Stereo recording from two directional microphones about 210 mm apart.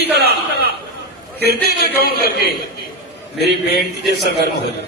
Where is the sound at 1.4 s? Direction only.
50° left (ahead or behind).